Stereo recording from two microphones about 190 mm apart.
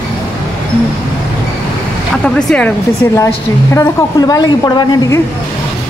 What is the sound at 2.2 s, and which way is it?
Speech, 5° left (ahead or behind).